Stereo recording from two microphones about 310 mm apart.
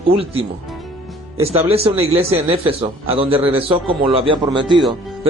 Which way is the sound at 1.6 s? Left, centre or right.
Centre.